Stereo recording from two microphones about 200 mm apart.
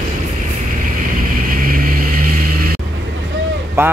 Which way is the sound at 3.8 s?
10° right (ahead or behind).